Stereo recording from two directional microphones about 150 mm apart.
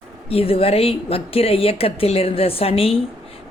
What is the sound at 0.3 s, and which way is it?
A woman's voice, 40° left (ahead or behind).